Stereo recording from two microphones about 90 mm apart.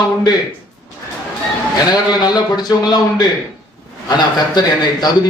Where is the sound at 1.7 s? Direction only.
50° left (ahead or behind).